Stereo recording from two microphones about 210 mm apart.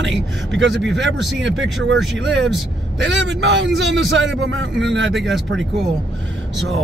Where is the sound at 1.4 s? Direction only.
65° right (ahead or behind).